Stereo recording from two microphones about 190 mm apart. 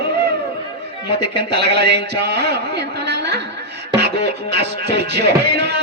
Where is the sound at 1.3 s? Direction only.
60° right (ahead or behind).